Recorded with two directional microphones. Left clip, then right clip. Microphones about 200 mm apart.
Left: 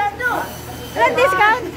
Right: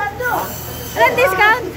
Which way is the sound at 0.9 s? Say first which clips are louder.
Right 1 dB; 15° left (ahead or behind).